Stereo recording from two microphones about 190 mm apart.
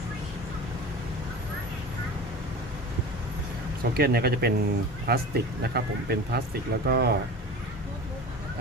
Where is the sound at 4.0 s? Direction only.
55° right (ahead or behind).